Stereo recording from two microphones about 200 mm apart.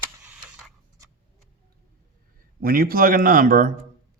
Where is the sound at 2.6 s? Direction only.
45° right (ahead or behind).